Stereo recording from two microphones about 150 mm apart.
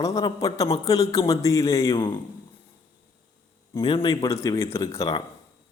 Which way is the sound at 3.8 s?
30° left (ahead or behind).